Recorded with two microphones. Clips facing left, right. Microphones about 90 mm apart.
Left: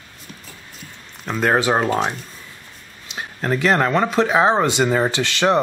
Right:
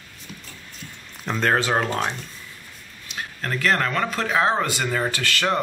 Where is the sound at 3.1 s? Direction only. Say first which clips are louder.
Left 6 dB; 20° left (ahead or behind).